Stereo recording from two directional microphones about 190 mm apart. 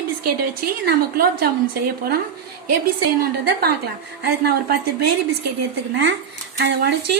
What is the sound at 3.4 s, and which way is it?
Speech, 55° right (ahead or behind).